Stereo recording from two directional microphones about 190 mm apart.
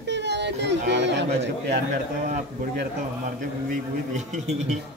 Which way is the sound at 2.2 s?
45° right (ahead or behind).